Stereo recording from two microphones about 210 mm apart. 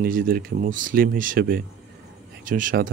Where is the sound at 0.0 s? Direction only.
45° right (ahead or behind).